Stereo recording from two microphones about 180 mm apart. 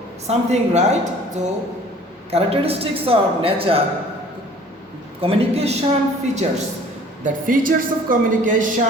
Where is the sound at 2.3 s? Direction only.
35° right (ahead or behind).